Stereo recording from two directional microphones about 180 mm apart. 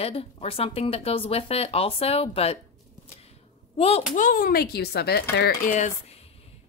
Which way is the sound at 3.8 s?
35° left (ahead or behind).